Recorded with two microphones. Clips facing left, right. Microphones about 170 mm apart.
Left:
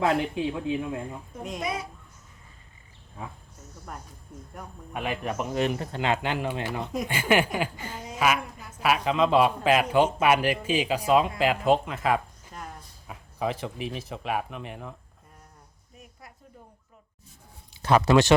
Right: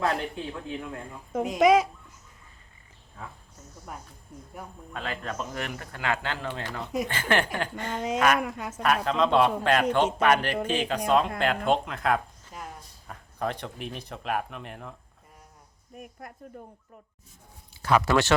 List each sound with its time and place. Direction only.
0.0 s speech: 15° left (ahead or behind)
1.5 s speech: 90° right
4.9 s speech: 15° left (ahead or behind)
7.9 s speech: 90° right
8.8 s a man's voice: 5° left (ahead or behind)
15.9 s speech: 55° right (ahead or behind)
17.8 s speech: 20° left (ahead or behind)